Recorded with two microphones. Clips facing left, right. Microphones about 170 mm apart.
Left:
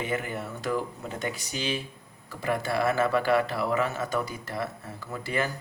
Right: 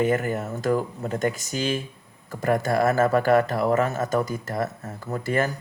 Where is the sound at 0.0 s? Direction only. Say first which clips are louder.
Right 8 dB; 45° right (ahead or behind).